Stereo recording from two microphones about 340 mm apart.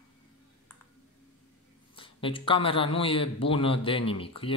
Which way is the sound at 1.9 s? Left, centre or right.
Centre.